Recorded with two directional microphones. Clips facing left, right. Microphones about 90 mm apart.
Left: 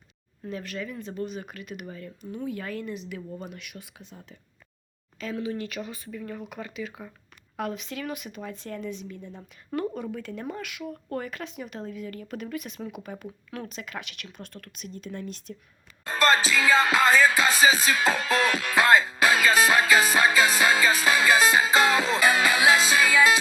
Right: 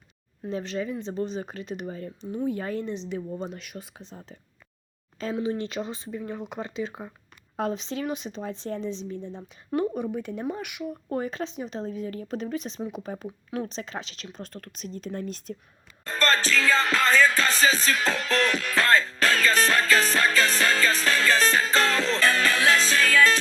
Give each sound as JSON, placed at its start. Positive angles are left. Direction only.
{"t": 0.5, "sound": "speech", "side_deg": -25}
{"t": 16.0, "sound": "music", "side_deg": 10}